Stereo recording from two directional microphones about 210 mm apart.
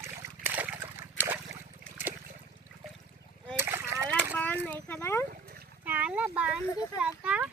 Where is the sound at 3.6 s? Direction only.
10° right (ahead or behind).